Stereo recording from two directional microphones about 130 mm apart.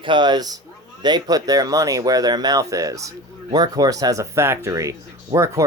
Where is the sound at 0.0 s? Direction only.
35° right (ahead or behind).